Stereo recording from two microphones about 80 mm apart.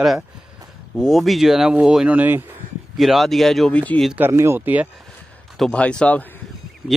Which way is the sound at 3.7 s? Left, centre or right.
Centre.